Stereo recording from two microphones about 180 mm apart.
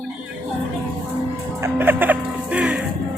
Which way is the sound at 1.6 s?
10° right (ahead or behind).